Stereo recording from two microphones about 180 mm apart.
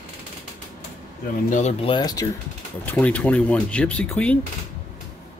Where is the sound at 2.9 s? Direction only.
10° left (ahead or behind).